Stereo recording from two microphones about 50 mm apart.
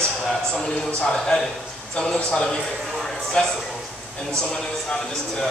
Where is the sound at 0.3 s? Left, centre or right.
Centre.